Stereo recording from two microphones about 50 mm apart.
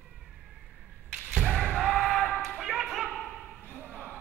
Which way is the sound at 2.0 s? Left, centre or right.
Centre.